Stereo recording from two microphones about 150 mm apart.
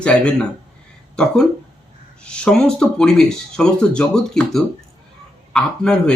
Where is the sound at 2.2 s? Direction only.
5° left (ahead or behind).